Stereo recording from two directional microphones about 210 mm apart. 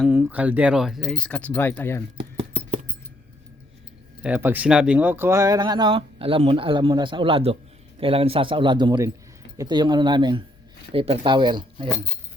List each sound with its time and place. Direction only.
0.0 s speech: 10° right (ahead or behind); by 2.0 s 10° left (ahead or behind)
2.1 s keys jangling: 30° right (ahead or behind)
4.2 s speech: 10° right (ahead or behind)